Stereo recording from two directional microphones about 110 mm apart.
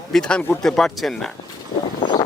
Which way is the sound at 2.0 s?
45° left (ahead or behind).